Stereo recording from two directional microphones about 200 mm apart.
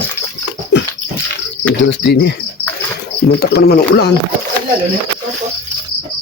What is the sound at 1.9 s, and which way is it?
Speech, 60° left (ahead or behind).